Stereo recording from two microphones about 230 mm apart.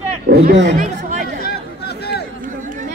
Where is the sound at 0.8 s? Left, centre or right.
Right.